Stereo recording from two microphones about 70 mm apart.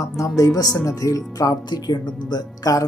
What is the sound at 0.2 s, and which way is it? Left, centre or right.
Speech, left.